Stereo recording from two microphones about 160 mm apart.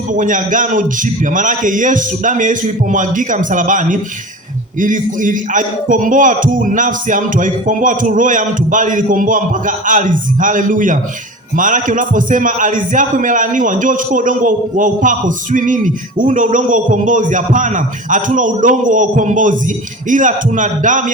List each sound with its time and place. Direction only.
0.1 s a man's voice: 55° right (ahead or behind)